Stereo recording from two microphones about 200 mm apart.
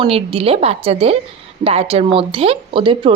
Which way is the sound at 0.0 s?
30° right (ahead or behind).